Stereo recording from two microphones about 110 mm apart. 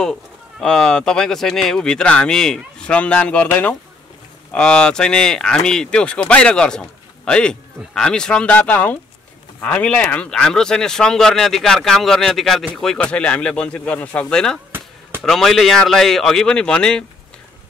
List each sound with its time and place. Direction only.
0.0 s speech: 5° left (ahead or behind)
14.7 s a sound: 20° right (ahead or behind)
15.2 s a man's voice: 5° left (ahead or behind)